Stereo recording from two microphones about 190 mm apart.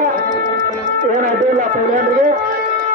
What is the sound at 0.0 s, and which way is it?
Music, 45° right (ahead or behind).